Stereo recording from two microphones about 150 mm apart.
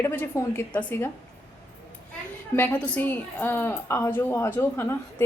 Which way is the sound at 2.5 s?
10° left (ahead or behind).